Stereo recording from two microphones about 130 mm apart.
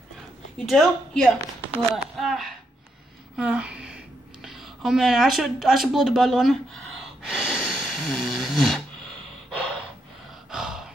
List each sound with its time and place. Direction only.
0.6 s a woman's voice: 5° left (ahead or behind)
3.3 s a sound: 10° right (ahead or behind)
9.6 s gasp: 5° left (ahead or behind)